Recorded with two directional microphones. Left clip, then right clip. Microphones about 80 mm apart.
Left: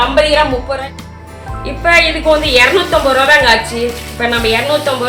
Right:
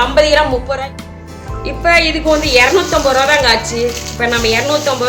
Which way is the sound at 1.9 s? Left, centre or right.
Right.